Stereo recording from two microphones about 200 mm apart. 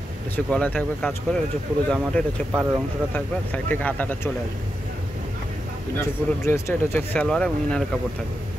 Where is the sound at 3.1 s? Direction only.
10° left (ahead or behind).